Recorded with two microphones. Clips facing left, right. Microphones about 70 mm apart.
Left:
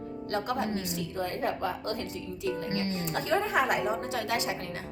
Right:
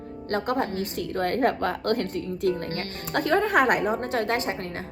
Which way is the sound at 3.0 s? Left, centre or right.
Right.